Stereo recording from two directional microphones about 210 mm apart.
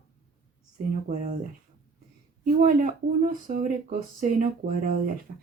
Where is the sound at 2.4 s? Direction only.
40° right (ahead or behind).